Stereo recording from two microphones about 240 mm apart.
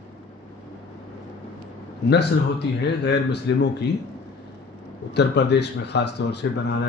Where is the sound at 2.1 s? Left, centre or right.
Left.